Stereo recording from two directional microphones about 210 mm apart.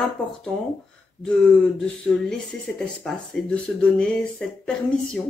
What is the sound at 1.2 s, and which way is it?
Speech, centre (ahead or behind).